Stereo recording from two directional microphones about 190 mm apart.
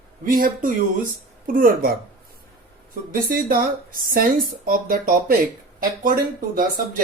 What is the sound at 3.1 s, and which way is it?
Speech, 50° right (ahead or behind).